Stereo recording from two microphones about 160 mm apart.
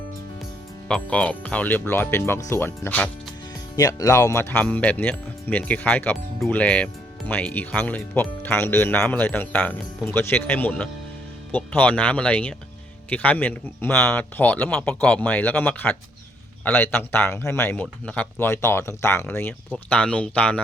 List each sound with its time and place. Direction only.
0.9 s speech: 5° left (ahead or behind)